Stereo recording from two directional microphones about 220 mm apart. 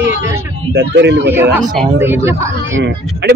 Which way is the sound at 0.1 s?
10° right (ahead or behind).